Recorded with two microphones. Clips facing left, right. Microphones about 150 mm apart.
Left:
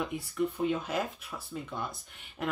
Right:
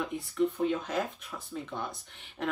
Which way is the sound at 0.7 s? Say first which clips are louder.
Even; 15° left (ahead or behind).